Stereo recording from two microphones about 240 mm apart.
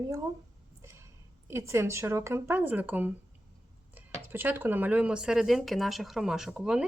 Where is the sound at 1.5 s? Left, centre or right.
Centre.